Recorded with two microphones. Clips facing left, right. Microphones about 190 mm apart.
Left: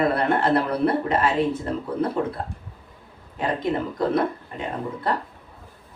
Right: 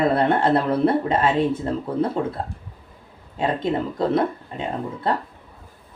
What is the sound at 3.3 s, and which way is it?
Speech, 25° right (ahead or behind).